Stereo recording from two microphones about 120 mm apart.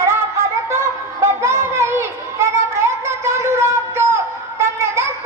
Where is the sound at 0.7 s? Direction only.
20° right (ahead or behind).